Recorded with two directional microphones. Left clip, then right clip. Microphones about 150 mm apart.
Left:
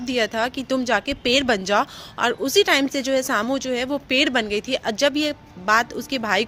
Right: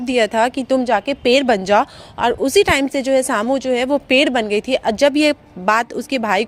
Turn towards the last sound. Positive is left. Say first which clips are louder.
# right 4 dB
turn(degrees=-50)  # may be behind; listen again after turning